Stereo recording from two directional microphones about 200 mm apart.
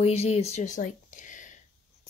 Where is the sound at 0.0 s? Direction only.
30° left (ahead or behind).